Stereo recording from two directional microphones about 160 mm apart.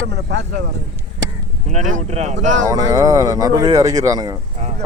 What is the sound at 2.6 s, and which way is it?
Speech, 25° right (ahead or behind).